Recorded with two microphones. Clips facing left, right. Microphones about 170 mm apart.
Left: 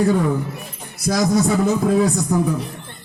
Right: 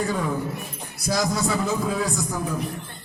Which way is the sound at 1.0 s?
55° left (ahead or behind).